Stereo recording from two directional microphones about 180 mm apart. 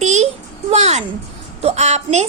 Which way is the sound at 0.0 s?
40° right (ahead or behind).